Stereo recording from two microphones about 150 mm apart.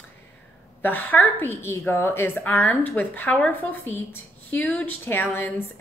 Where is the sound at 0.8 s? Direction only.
10° left (ahead or behind).